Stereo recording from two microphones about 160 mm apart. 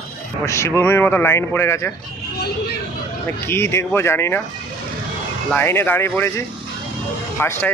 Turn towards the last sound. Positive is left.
turn(degrees=15)  # may be behind; listen again after turning